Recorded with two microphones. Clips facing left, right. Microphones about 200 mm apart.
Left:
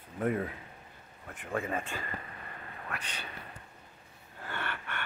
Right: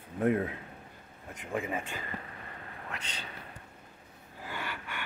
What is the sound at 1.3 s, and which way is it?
Speech, 10° right (ahead or behind).